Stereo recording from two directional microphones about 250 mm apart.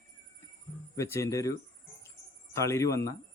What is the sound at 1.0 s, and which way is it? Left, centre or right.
Speech, centre.